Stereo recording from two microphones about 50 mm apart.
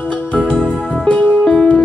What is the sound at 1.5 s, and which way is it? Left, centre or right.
Music, left.